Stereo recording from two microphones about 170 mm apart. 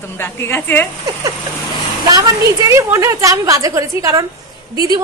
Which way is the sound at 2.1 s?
20° right (ahead or behind).